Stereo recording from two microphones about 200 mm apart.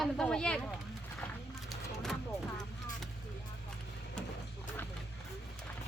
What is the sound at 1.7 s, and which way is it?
Vehicle, centre (ahead or behind).